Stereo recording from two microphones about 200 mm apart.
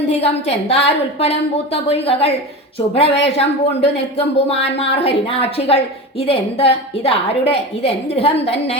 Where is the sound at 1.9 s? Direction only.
30° left (ahead or behind).